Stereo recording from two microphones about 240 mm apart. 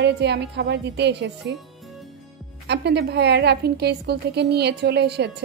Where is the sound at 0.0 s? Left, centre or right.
Right.